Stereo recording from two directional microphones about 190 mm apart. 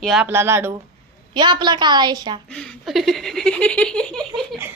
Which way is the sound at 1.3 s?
25° right (ahead or behind).